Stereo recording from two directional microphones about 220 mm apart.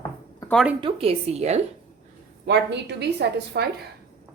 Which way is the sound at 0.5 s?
5° right (ahead or behind).